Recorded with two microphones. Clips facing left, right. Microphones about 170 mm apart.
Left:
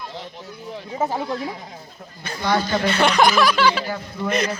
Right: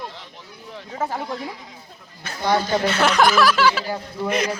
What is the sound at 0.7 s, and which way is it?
Speech, 10° left (ahead or behind).